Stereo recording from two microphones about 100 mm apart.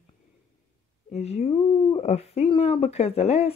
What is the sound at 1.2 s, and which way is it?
Speech, 90° left.